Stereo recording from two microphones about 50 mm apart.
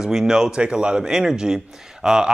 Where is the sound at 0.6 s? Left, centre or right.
Right.